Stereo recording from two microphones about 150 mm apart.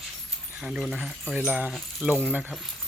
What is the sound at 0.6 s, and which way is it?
Speech, 5° right (ahead or behind).